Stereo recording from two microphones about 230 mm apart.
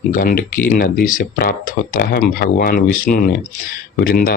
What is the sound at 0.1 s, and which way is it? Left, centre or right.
Speech, left.